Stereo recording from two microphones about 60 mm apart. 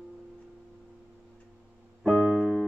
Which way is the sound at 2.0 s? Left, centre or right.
Centre.